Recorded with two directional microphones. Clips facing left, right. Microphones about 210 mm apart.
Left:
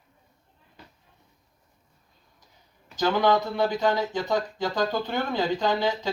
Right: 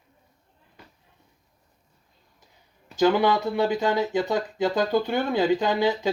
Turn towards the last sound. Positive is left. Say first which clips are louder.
# right 2 dB
turn(degrees=-15)  # may be behind; listen again after turning